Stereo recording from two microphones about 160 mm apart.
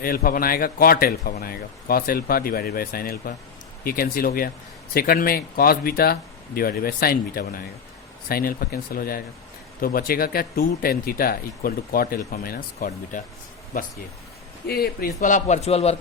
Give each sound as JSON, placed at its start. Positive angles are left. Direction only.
{"t": 0.0, "sound": "a man's voice", "side_deg": 65}
{"t": 14.7, "sound": "a man's voice", "side_deg": 65}